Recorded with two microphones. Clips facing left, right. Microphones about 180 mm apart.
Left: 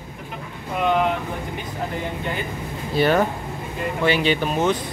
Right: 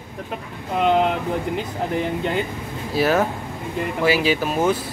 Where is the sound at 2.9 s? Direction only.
Centre (ahead or behind).